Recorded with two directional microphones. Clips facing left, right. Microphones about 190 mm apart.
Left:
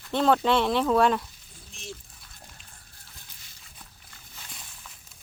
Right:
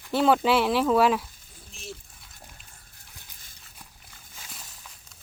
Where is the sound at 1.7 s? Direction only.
Centre (ahead or behind).